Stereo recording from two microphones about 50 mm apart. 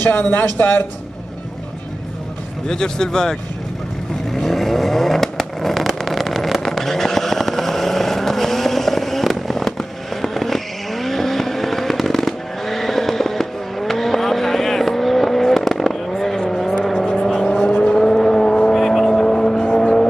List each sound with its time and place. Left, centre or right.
0.0 s speech: left
2.7 s speech: centre
4.3 s vehicle: centre